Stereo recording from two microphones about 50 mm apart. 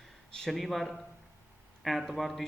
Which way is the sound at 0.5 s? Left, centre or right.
Centre.